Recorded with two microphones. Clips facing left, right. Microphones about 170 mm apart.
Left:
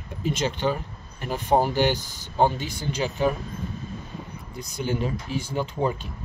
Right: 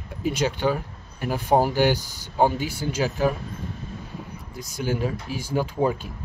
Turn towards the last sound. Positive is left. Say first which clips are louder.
# right 3 dB
turn(degrees=-10)  # may be behind; listen again after turning